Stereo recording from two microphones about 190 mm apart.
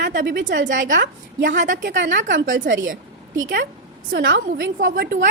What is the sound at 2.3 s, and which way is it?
A woman's voice, 90° right.